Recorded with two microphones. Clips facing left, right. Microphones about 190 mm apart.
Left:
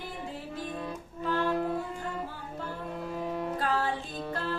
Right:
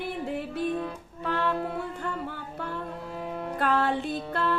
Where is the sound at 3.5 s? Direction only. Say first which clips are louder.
Right 8 dB; 65° right (ahead or behind).